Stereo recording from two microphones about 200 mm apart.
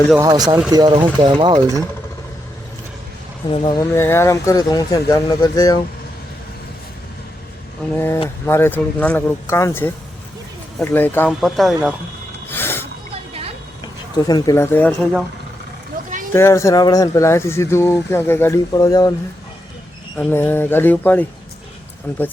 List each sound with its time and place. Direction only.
0.2 s speech: 20° right (ahead or behind)
3.5 s speech: 25° left (ahead or behind)
3.9 s speech: 10° left (ahead or behind)
7.9 s speech: 10° left (ahead or behind)
11.3 s speech: centre (ahead or behind)
12.5 s snort: 10° left (ahead or behind)
14.3 s speech: 20° left (ahead or behind)
16.3 s speech: 15° left (ahead or behind)
20.1 s speech: 10° left (ahead or behind)